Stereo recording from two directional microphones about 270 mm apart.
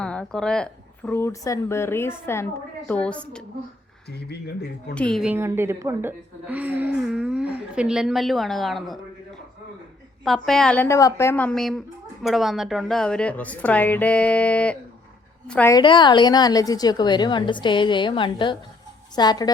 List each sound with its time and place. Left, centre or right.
0.0 s a woman's voice: centre
4.1 s speech: left
4.9 s a woman's voice: centre